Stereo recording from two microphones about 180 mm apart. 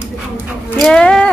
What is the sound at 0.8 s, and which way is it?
Speech, 5° left (ahead or behind).